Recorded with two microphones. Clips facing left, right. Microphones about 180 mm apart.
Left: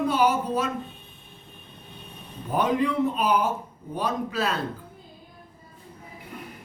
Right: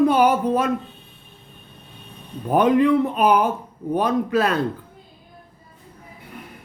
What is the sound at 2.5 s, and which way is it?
Speech, 60° right (ahead or behind).